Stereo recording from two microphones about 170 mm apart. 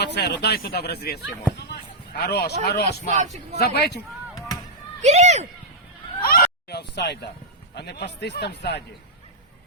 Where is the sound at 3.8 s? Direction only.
80° left.